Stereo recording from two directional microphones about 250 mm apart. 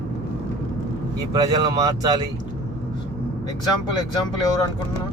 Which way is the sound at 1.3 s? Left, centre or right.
Centre.